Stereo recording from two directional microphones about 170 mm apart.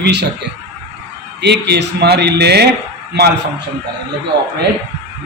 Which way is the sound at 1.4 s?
80° right.